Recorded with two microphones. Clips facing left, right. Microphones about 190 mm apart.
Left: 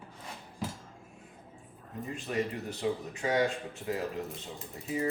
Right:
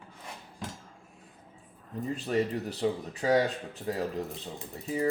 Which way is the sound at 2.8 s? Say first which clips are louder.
Right 4 dB; 35° right (ahead or behind).